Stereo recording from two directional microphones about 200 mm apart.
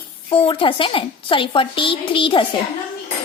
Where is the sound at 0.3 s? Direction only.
25° left (ahead or behind).